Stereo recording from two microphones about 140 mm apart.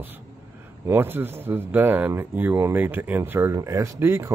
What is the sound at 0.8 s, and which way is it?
Speech, 15° right (ahead or behind).